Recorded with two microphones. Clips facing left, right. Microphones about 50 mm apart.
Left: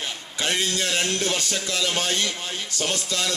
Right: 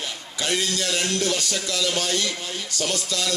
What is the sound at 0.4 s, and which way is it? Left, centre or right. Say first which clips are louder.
Music: even; left.